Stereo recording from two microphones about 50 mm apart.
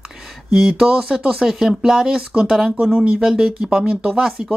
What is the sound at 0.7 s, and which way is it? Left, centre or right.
Speech, right.